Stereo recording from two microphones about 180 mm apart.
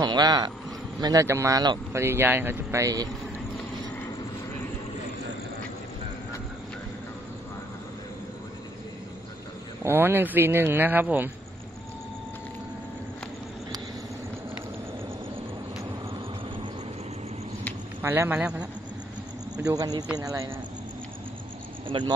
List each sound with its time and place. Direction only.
0.0 s speech: 25° right (ahead or behind)
9.8 s speech: 10° right (ahead or behind)
18.0 s speech: 15° right (ahead or behind)
19.5 s a man's voice: 20° right (ahead or behind)
21.8 s speech: 25° right (ahead or behind)